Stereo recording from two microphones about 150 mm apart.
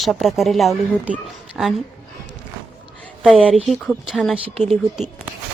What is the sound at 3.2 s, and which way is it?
Speech, 5° right (ahead or behind).